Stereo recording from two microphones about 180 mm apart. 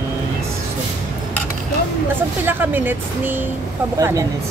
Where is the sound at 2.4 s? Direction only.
10° right (ahead or behind).